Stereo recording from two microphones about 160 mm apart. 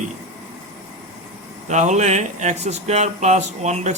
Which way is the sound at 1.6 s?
45° right (ahead or behind).